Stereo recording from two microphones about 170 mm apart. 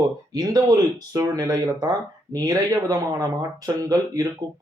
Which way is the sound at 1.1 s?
20° right (ahead or behind).